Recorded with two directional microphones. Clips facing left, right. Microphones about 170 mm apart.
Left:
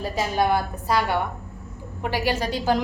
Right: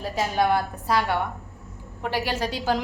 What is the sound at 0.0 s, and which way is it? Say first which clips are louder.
A woman's voice: left 1 dB; centre (ahead or behind).